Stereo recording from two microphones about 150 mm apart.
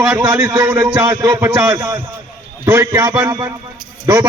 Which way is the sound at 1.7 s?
20° right (ahead or behind).